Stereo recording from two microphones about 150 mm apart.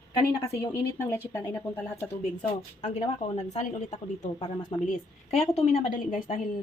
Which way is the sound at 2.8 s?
50° left (ahead or behind).